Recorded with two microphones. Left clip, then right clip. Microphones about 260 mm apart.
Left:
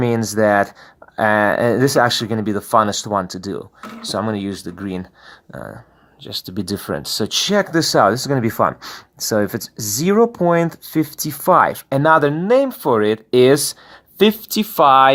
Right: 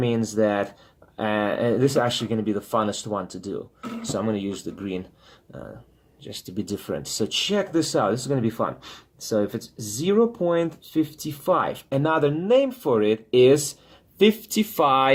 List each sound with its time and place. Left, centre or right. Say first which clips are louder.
0.0 s speech: left 6 dB; left